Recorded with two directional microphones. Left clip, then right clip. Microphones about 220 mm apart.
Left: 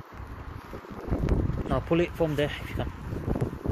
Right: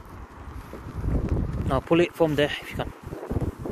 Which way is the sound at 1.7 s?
25° right (ahead or behind).